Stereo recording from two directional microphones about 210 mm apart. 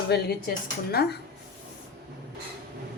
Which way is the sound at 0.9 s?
50° left (ahead or behind).